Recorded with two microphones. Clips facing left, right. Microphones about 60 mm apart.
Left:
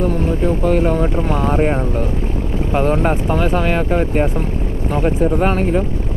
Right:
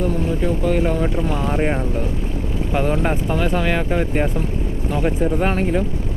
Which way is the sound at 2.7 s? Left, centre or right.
Left.